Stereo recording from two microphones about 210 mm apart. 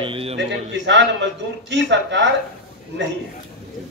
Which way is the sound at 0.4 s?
55° right (ahead or behind).